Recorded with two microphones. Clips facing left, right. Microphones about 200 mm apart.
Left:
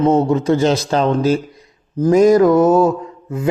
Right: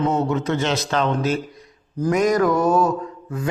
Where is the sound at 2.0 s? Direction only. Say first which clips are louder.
Left 8 dB; 30° left (ahead or behind).